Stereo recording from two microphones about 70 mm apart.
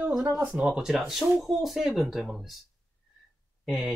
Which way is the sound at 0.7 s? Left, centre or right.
Centre.